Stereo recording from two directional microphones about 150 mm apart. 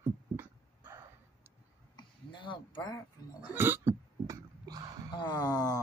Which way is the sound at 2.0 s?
30° left (ahead or behind).